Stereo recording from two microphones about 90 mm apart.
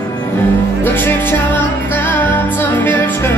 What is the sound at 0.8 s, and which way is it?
Music, 25° left (ahead or behind).